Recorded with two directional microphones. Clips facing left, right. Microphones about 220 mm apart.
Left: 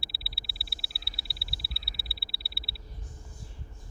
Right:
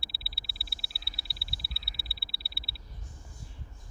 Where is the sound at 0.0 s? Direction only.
Centre (ahead or behind).